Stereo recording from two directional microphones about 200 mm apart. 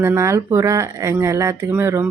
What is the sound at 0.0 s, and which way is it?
Speech, 15° right (ahead or behind).